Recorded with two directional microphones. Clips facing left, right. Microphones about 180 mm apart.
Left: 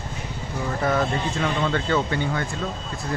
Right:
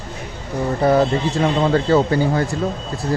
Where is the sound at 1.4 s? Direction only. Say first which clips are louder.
Right 8 dB; 35° right (ahead or behind).